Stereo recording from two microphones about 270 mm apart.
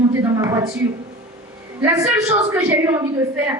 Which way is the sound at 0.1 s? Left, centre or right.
Centre.